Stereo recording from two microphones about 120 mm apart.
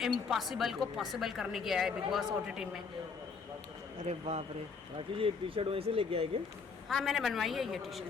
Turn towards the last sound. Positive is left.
turn(degrees=0)  # may be behind; listen again after turning